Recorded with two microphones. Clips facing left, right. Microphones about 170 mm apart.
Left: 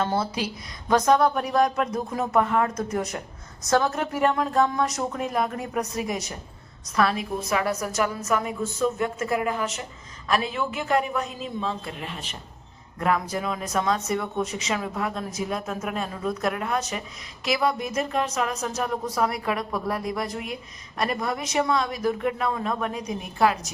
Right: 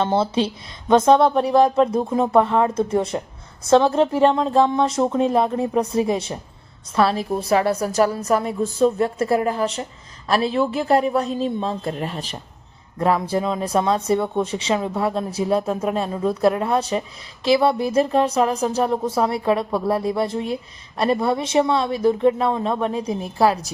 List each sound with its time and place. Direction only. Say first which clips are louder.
0.0 s speech: right 6 dB; 25° right (ahead or behind)